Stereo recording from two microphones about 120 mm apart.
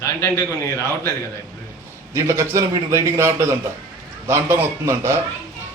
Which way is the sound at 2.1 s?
25° right (ahead or behind).